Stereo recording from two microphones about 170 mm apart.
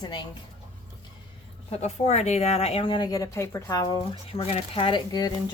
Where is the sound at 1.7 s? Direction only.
40° left (ahead or behind).